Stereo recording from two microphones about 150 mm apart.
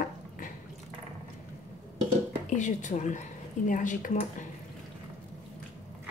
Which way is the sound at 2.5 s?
55° left (ahead or behind).